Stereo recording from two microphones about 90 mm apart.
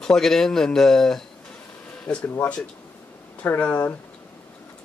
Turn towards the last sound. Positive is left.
turn(degrees=15)  # may be behind; listen again after turning